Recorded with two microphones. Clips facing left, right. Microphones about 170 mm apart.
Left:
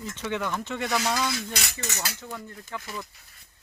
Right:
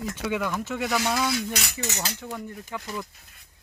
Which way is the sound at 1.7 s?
20° right (ahead or behind).